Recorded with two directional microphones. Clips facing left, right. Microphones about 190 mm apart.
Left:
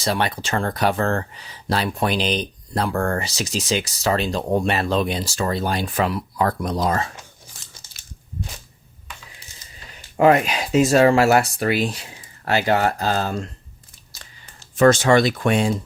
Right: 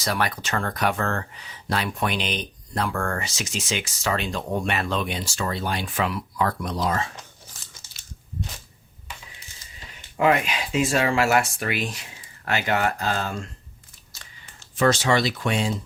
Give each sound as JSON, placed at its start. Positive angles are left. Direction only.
{"t": 0.0, "sound": "speech", "side_deg": 25}
{"t": 10.2, "sound": "speech", "side_deg": 40}
{"t": 14.1, "sound": "a sound", "side_deg": 40}